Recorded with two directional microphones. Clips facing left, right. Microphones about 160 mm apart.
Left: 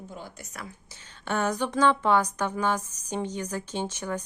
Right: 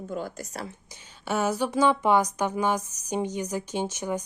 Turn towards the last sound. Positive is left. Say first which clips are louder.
# right 2 dB
turn(degrees=-10)  # may be behind; listen again after turning